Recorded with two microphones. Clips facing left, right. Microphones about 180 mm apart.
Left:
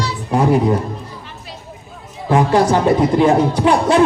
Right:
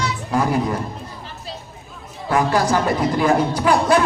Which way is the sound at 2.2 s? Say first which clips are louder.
Left 5 dB; 25° left (ahead or behind).